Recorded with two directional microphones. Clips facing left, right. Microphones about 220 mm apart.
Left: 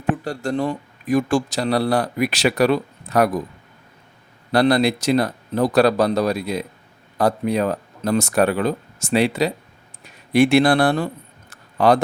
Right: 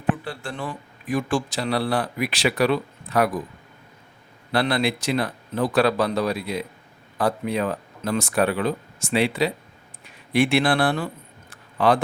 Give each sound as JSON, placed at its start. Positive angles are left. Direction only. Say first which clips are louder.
{"t": 0.3, "sound": "a man's voice", "louder": "left 9 dB", "side_deg": 40}
{"t": 4.5, "sound": "a man's voice", "louder": "left 6 dB", "side_deg": 40}